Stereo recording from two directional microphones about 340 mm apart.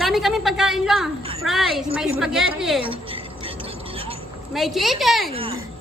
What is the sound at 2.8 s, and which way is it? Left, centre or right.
Music, centre.